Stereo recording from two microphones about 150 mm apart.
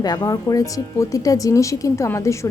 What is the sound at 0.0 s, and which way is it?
Speech, 25° left (ahead or behind).